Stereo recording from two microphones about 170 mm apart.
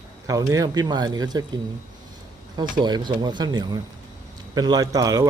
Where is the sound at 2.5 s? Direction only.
25° right (ahead or behind).